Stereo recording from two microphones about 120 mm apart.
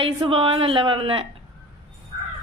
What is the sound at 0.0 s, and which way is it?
A woman's voice, 50° right (ahead or behind).